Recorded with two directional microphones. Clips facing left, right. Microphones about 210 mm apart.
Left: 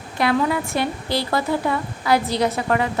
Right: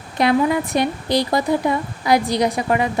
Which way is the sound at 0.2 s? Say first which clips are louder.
Right 3 dB; 20° right (ahead or behind).